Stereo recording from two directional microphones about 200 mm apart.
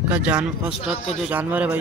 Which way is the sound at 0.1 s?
5° right (ahead or behind).